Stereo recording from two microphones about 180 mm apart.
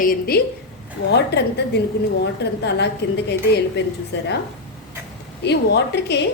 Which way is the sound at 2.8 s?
70° left (ahead or behind).